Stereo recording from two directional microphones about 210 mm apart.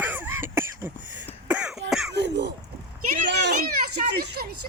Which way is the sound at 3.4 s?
50° right (ahead or behind).